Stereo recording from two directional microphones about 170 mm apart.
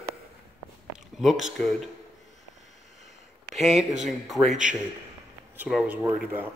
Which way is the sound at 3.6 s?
Centre (ahead or behind).